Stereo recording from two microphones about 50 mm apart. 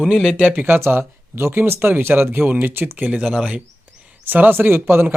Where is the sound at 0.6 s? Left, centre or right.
Right.